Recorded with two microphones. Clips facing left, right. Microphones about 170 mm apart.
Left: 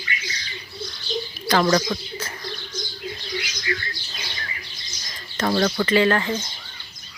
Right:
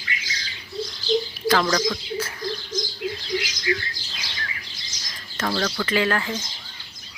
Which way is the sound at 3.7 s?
20° right (ahead or behind).